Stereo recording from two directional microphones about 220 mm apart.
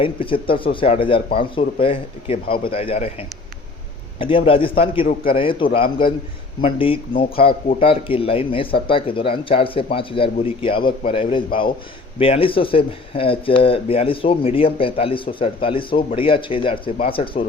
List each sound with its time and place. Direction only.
0.0 s speech: 25° left (ahead or behind)